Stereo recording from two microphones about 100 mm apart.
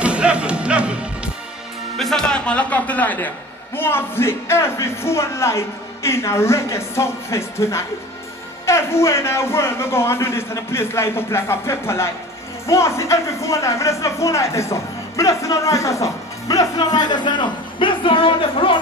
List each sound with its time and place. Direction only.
0.0 s music: 10° right (ahead or behind)
2.0 s speech: 5° left (ahead or behind); by 18.8 s 60° left (ahead or behind)